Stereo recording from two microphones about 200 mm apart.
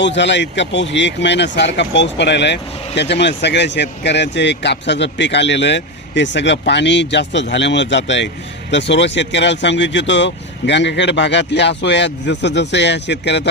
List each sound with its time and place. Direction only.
0.0 s speech: 65° left (ahead or behind)